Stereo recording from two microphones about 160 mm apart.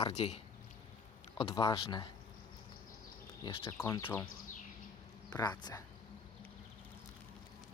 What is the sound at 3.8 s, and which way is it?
Speech, 15° left (ahead or behind).